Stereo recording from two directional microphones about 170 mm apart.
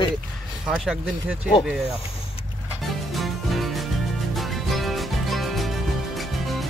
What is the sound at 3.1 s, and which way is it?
Music, centre (ahead or behind).